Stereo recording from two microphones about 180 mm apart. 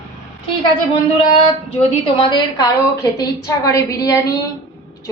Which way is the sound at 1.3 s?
35° left (ahead or behind).